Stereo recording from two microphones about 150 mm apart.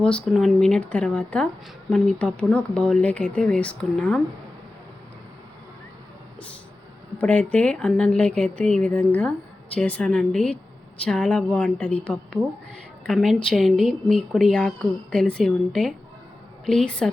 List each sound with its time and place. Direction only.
0.3 s speech: 5° left (ahead or behind)
7.2 s speech: 10° left (ahead or behind)